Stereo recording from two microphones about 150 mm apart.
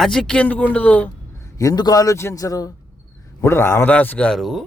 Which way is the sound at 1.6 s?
25° left (ahead or behind).